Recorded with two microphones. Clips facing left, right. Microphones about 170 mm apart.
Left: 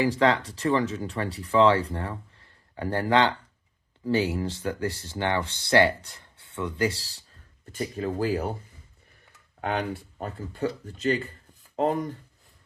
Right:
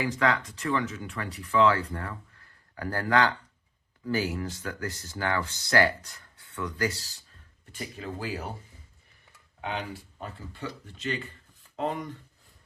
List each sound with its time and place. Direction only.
0.0 s speech: 30° left (ahead or behind)
7.7 s speech: 40° left (ahead or behind)
9.6 s speech: 55° left (ahead or behind)